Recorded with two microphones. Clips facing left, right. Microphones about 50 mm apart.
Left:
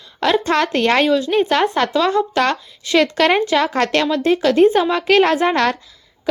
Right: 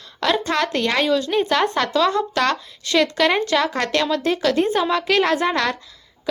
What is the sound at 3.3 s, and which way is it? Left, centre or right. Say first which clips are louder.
Speech: left 3 dB; left.